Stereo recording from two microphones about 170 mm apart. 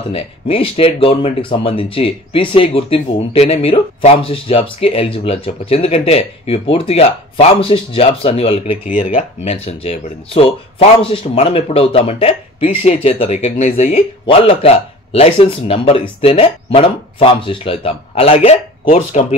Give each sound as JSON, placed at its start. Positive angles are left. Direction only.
{"t": 0.1, "sound": "speech", "side_deg": 35}
{"t": 8.8, "sound": "speech", "side_deg": 45}